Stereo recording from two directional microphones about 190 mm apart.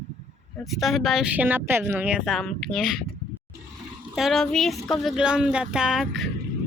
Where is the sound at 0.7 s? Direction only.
Centre (ahead or behind).